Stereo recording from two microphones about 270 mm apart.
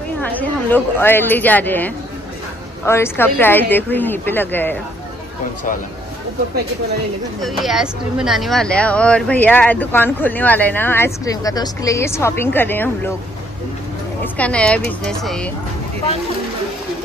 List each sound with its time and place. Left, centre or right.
0.2 s speech: centre
7.4 s speech: centre
14.2 s a woman's voice: centre